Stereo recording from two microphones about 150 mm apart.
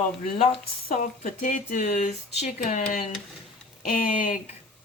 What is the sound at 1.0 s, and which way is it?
Speech, 60° left (ahead or behind).